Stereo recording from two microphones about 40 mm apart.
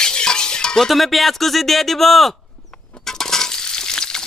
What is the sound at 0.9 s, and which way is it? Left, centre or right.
Speech, centre.